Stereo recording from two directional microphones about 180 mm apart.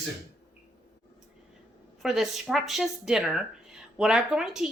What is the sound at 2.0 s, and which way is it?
Speech, centre (ahead or behind).